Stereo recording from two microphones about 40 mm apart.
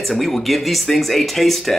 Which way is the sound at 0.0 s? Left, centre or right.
Centre.